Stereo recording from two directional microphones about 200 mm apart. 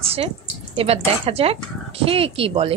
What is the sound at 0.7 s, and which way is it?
Speech, 30° right (ahead or behind).